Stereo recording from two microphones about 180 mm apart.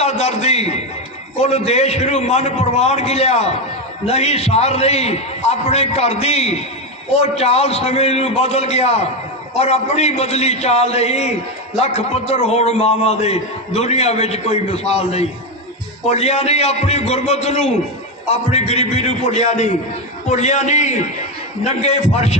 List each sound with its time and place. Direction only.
0.0 s a man's voice: 40° left (ahead or behind)